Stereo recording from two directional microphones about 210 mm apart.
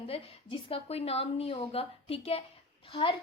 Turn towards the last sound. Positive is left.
turn(degrees=25)  # may be behind; listen again after turning